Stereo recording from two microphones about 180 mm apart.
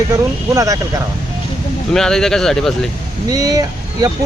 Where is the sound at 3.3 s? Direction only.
20° right (ahead or behind).